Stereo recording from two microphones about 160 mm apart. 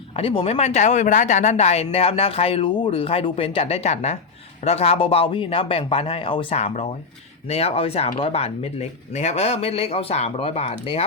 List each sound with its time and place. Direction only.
0.2 s speech: 35° left (ahead or behind)